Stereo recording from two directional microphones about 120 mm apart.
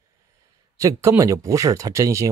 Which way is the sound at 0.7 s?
25° right (ahead or behind).